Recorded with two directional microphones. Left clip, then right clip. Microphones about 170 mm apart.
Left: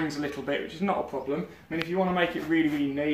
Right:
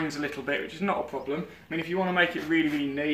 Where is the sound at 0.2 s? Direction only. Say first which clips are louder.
Even; 20° left (ahead or behind).